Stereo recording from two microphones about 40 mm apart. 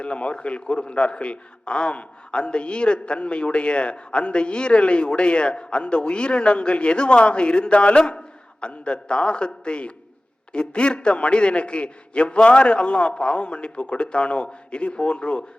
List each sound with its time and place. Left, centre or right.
0.0 s a man's voice: left